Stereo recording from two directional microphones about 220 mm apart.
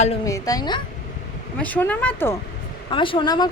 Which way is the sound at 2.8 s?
20° left (ahead or behind).